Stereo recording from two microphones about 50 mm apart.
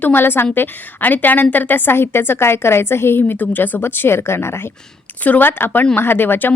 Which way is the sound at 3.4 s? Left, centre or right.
Left.